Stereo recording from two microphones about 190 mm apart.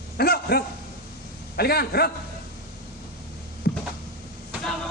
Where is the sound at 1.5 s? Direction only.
55° left (ahead or behind).